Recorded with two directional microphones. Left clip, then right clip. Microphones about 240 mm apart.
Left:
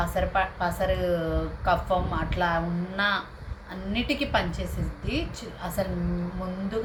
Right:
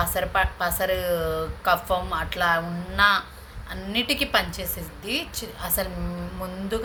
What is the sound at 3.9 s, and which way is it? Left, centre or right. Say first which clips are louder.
A woman's voice: right 4 dB; right.